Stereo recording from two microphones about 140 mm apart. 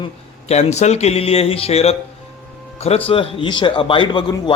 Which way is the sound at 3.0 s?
40° left (ahead or behind).